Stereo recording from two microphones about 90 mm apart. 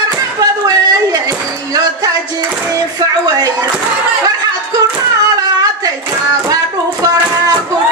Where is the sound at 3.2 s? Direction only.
45° right (ahead or behind).